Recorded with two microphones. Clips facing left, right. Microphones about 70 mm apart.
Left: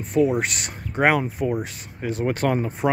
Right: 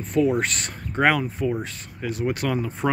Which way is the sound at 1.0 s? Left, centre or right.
Left.